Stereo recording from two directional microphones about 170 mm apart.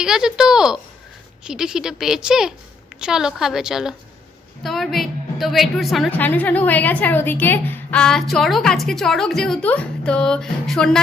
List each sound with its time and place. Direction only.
0.0 s a woman's voice: 5° right (ahead or behind)
6.1 s a woman's voice: 10° left (ahead or behind)